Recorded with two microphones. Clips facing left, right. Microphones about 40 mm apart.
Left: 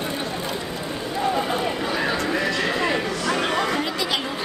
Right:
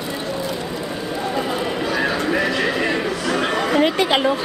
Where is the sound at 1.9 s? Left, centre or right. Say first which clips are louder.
Right 5 dB; centre.